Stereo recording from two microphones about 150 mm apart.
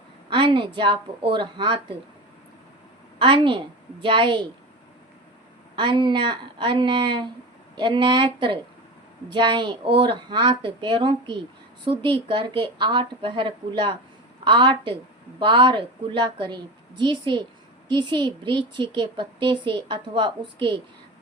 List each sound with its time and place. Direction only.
0.3 s a woman's voice: 35° right (ahead or behind)
3.2 s a woman's voice: 35° right (ahead or behind)
5.7 s a woman's voice: 30° right (ahead or behind)